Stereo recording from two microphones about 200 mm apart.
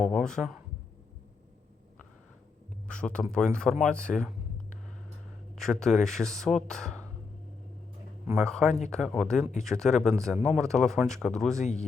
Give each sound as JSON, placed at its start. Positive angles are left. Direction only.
{"t": 0.0, "sound": "speech", "side_deg": 0}
{"t": 2.8, "sound": "speech", "side_deg": 5}
{"t": 5.5, "sound": "speech", "side_deg": 0}
{"t": 8.4, "sound": "speech", "side_deg": 0}
{"t": 10.3, "sound": "speech", "side_deg": -10}
{"t": 10.6, "sound": "speech", "side_deg": 0}
{"t": 11.6, "sound": "speech", "side_deg": 35}